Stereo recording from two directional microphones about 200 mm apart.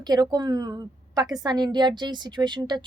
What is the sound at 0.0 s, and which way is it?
A woman's voice, 20° right (ahead or behind).